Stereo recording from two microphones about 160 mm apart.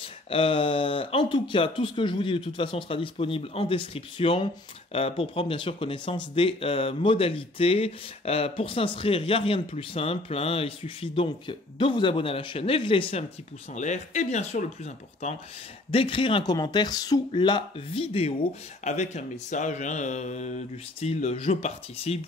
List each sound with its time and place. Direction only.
0.0 s speech: 35° left (ahead or behind)
13.7 s speech: 50° left (ahead or behind)
15.9 s speech: 35° left (ahead or behind)